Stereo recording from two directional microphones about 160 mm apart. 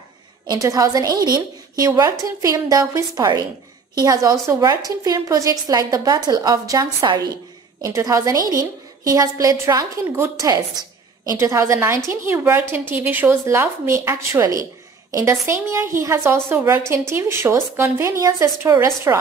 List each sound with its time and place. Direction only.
0.5 s a woman's voice: 20° right (ahead or behind)